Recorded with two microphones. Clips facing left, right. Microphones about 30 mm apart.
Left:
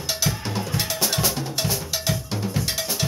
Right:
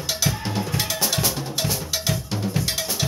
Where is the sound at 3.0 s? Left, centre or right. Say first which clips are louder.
Even; right.